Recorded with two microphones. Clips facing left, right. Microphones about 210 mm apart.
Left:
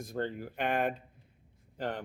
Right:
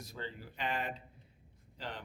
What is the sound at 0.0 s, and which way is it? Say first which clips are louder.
A man's voice: left 10 dB; 55° left (ahead or behind).